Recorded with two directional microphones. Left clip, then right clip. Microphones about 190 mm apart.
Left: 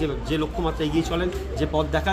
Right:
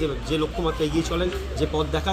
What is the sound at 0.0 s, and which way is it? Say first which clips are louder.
Speech: right 1 dB; 25° left (ahead or behind).